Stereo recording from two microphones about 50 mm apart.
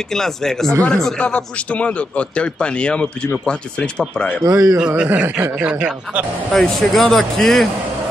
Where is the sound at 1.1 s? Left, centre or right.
Left.